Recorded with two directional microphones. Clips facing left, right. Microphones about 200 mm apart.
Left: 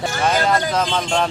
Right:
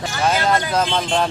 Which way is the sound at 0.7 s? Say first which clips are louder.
Even; centre (ahead or behind).